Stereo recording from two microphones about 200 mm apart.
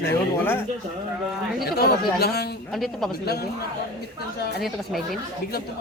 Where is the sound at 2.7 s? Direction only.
Centre (ahead or behind).